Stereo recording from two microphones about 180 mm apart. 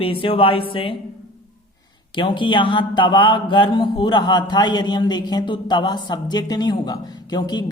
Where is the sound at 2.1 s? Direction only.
25° left (ahead or behind).